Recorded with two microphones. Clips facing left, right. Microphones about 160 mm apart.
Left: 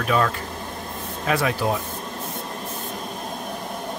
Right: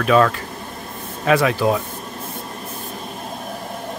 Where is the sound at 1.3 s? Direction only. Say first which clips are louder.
Right 6 dB; 90° right.